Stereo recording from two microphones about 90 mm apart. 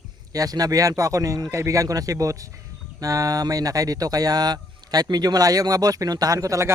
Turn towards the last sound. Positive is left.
turn(degrees=-35)  # may be behind; listen again after turning